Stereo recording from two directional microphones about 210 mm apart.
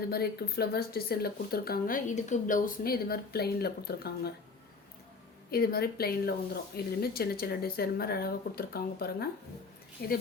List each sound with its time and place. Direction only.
0.1 s speech: 50° left (ahead or behind)
5.5 s speech: 45° left (ahead or behind)